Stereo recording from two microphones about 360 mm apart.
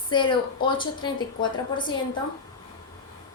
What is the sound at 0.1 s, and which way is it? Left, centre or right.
Speech, centre.